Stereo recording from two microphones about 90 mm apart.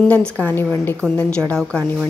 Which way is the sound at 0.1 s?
15° left (ahead or behind).